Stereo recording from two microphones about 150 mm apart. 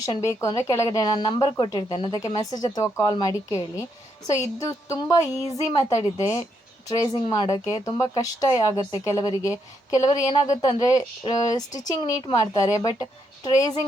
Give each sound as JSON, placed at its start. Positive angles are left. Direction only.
{"t": 0.0, "sound": "speech", "side_deg": 20}